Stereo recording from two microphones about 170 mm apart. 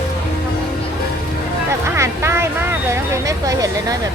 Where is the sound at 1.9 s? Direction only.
15° right (ahead or behind).